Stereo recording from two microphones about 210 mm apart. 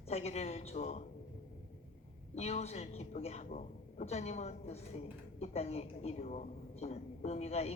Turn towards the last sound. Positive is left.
turn(degrees=30)  # may be behind; listen again after turning